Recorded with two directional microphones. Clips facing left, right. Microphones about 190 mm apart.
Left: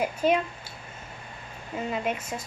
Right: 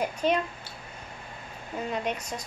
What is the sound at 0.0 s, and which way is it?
Speech, 10° left (ahead or behind).